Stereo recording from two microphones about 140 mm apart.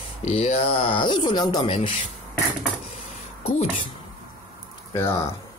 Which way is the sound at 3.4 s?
45° left (ahead or behind).